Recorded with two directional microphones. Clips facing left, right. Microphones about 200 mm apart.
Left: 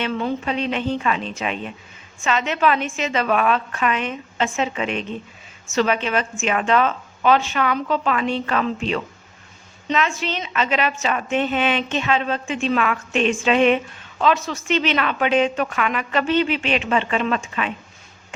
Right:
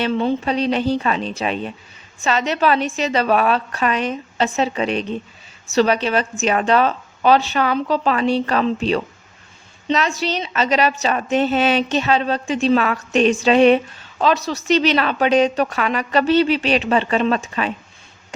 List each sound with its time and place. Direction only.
0.0 s a woman's voice: 30° right (ahead or behind)